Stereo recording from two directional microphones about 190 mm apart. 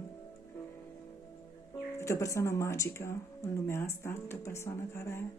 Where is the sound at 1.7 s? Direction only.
15° left (ahead or behind).